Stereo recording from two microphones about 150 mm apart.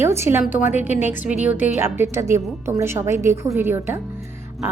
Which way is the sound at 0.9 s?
50° left (ahead or behind).